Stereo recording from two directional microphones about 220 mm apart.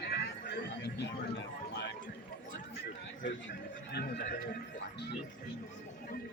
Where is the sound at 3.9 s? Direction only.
45° left (ahead or behind).